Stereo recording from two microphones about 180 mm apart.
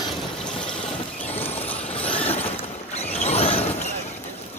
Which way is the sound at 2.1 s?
35° left (ahead or behind).